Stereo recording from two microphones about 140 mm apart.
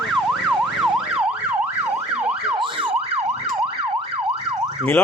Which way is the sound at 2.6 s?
35° right (ahead or behind).